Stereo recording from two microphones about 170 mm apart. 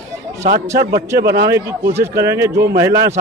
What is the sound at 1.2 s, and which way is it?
Speech, 75° right (ahead or behind).